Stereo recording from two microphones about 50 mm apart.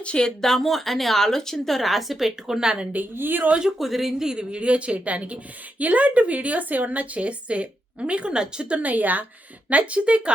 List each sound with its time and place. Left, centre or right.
0.0 s speech: centre
0.4 s a woman's voice: centre
2.9 s a woman's voice: right
3.8 s a woman's voice: centre
8.8 s a woman's voice: right